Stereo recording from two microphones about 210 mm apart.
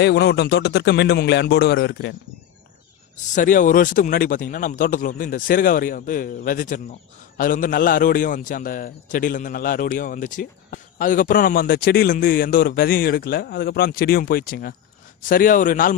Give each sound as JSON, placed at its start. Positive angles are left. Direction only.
{"t": 0.0, "sound": "a man's voice", "side_deg": 50}
{"t": 3.3, "sound": "a man's voice", "side_deg": 40}